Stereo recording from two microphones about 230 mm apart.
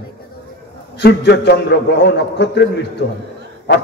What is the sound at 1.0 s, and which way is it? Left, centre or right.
A man's voice, left.